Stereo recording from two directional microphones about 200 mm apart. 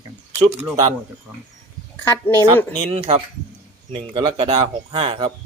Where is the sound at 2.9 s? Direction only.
30° right (ahead or behind).